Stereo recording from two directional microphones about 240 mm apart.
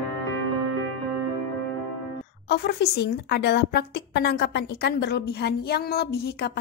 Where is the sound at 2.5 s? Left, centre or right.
Left.